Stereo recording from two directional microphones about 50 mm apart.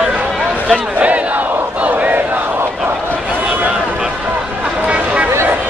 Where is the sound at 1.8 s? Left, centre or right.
Right.